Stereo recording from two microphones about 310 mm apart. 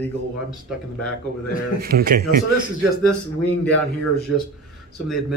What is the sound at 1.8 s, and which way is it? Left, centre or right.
Speech, right.